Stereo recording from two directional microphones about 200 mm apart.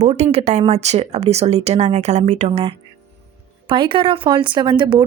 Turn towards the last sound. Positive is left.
turn(degrees=-25)  # may be behind; listen again after turning